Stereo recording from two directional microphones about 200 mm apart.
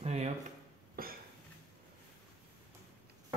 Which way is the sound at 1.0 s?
45° right (ahead or behind).